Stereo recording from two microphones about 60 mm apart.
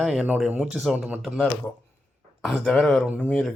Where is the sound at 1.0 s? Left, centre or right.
Right.